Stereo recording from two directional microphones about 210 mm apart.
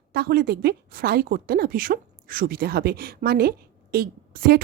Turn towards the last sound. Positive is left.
turn(degrees=-45)  # may be behind; listen again after turning